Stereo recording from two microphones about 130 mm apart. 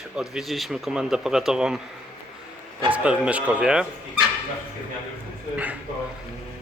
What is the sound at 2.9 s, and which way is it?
Speech, 10° right (ahead or behind).